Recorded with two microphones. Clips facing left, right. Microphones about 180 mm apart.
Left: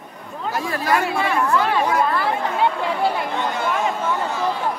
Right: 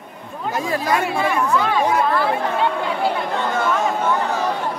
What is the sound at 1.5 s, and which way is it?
Speech, 5° left (ahead or behind).